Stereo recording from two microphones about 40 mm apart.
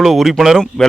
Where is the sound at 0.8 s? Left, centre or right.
Left.